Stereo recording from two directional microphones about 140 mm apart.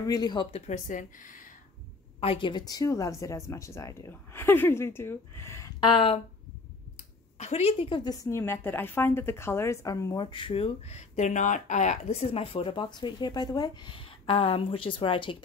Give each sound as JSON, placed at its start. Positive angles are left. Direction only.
{"t": 0.0, "sound": "speech", "side_deg": 30}
{"t": 0.5, "sound": "speech", "side_deg": 55}
{"t": 2.1, "sound": "speech", "side_deg": 40}
{"t": 7.3, "sound": "a woman's voice", "side_deg": 50}
{"t": 8.0, "sound": "a woman's voice", "side_deg": 25}
{"t": 10.2, "sound": "speech", "side_deg": 35}